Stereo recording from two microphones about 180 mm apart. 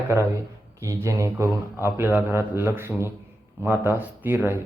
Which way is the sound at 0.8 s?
15° right (ahead or behind).